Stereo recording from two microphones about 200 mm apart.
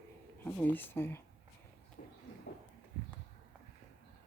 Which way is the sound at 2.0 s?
45° left (ahead or behind).